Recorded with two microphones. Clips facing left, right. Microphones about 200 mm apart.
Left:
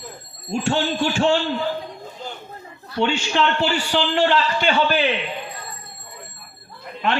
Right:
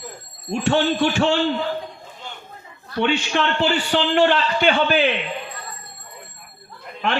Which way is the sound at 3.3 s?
55° right (ahead or behind).